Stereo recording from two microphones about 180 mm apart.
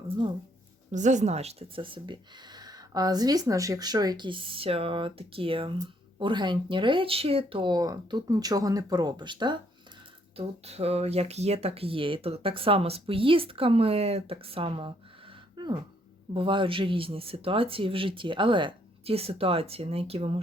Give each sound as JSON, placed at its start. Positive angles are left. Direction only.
{"t": 0.9, "sound": "speech", "side_deg": -40}
{"t": 15.5, "sound": "a sound", "side_deg": -25}
{"t": 16.3, "sound": "speech", "side_deg": -30}